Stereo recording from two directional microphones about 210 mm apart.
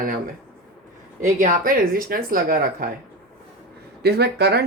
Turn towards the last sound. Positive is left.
turn(degrees=-50)  # may be behind; listen again after turning